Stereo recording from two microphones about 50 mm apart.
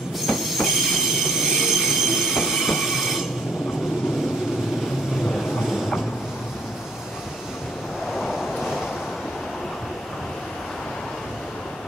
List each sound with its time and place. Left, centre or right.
0.3 s train: centre
5.5 s train: centre
8.1 s vehicle: centre